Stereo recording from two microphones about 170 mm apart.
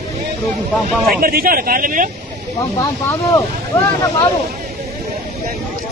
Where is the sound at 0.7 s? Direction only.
Centre (ahead or behind).